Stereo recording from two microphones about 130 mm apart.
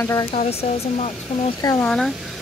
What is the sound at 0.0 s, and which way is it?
Speech, 25° left (ahead or behind).